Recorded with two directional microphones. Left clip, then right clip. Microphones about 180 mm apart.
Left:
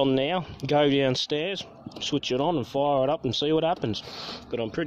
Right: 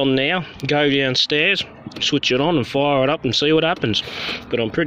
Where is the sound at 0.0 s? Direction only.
5° left (ahead or behind).